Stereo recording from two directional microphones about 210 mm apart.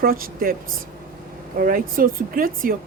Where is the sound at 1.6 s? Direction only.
40° right (ahead or behind).